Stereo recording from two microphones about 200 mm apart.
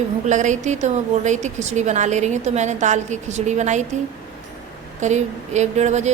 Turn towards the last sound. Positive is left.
turn(degrees=-35)  # may be behind; listen again after turning